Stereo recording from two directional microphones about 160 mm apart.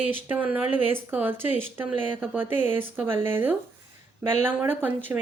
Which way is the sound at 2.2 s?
10° right (ahead or behind).